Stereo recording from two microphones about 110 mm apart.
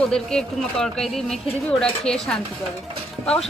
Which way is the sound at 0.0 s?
5° left (ahead or behind).